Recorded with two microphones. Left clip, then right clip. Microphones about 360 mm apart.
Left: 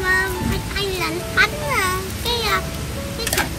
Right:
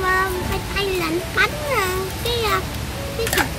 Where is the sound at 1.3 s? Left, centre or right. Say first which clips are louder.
Left 2 dB; centre.